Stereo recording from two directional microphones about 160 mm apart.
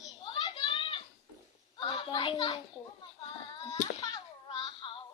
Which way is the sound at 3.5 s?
25° left (ahead or behind).